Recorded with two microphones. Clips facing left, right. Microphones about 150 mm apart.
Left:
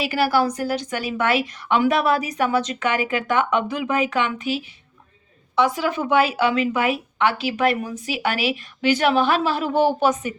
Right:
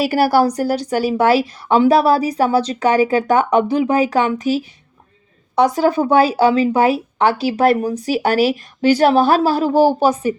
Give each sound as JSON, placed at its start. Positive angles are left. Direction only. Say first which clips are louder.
{"t": 0.0, "sound": "speech", "louder": "right 6 dB", "side_deg": -40}